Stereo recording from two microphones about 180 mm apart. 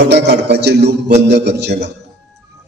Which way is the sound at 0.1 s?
70° right (ahead or behind).